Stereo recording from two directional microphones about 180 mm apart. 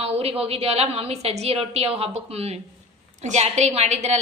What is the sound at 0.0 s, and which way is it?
A woman's voice, 35° right (ahead or behind).